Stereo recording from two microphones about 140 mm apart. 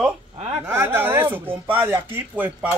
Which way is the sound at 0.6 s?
15° right (ahead or behind).